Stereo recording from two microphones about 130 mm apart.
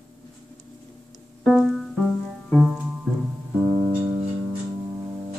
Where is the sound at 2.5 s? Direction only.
10° right (ahead or behind).